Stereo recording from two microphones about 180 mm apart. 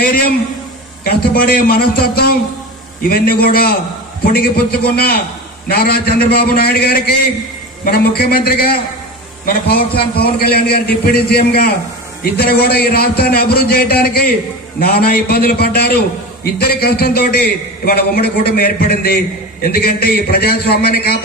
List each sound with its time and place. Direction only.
1.0 s a man's voice: 60° left (ahead or behind)
9.9 s a man's voice: 60° left (ahead or behind)